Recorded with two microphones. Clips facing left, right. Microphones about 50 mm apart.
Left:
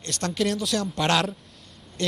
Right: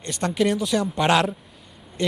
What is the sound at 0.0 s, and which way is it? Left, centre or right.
A man's voice, centre.